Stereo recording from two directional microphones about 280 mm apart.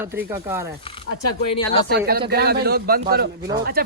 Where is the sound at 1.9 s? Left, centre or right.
Right.